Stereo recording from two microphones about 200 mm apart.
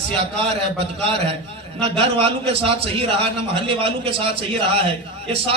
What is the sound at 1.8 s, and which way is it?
A man's voice, 30° right (ahead or behind).